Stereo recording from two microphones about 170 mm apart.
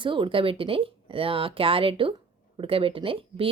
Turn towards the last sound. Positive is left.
turn(degrees=-30)  # may be behind; listen again after turning